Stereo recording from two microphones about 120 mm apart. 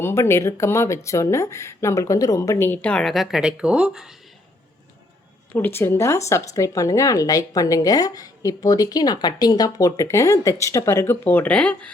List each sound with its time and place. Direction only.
0.0 s speech: 20° left (ahead or behind); by 4.1 s 5° right (ahead or behind)
5.5 s speech: 20° left (ahead or behind)